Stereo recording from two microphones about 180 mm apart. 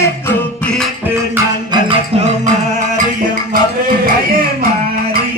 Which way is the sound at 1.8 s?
35° right (ahead or behind).